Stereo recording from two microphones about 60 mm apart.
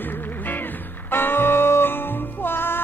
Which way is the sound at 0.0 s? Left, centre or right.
Left.